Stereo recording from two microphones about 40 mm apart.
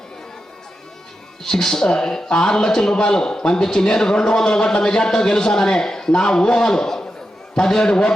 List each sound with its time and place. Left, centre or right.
1.5 s a man's voice: centre